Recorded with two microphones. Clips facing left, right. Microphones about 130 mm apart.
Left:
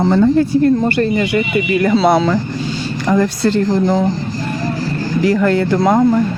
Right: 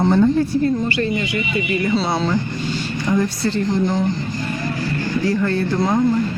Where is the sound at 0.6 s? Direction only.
60° left (ahead or behind); by 2.4 s 80° left.